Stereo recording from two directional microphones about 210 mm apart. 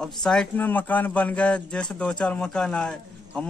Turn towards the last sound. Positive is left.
turn(degrees=5)  # may be behind; listen again after turning